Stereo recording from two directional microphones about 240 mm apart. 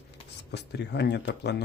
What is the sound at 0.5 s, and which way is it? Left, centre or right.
Speech, left.